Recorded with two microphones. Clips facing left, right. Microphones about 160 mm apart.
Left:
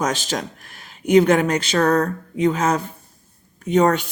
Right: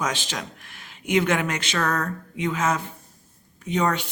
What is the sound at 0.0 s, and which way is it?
Speech, 40° left (ahead or behind).